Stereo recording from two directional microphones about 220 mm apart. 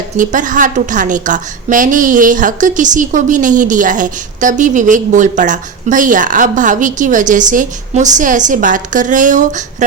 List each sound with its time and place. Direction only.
0.2 s a woman's voice: 35° right (ahead or behind)